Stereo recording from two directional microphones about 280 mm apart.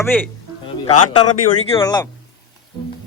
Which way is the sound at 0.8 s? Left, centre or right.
Left.